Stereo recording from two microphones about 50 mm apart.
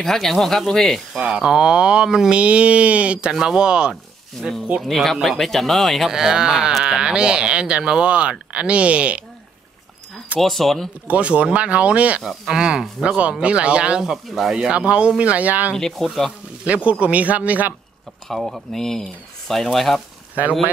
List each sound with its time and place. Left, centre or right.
0.0 s speech: centre
1.1 s speech: centre
2.3 s speech: right
4.4 s speech: centre
6.0 s speech: centre; by 9.2 s right
10.4 s speech: centre
11.1 s speech: right
12.2 s speech: centre
12.5 s speech: centre; by 15.7 s right
15.7 s speech: centre
16.6 s speech: right
18.3 s speech: centre